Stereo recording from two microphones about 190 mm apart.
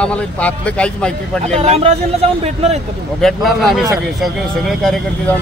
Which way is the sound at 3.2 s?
Centre (ahead or behind).